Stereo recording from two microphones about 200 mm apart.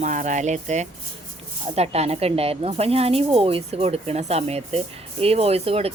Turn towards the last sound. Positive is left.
turn(degrees=-30)  # may be behind; listen again after turning